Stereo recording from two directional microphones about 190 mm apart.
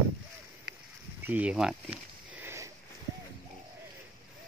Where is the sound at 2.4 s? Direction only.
15° right (ahead or behind).